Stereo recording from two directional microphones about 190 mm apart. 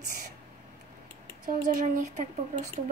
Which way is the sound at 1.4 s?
40° right (ahead or behind).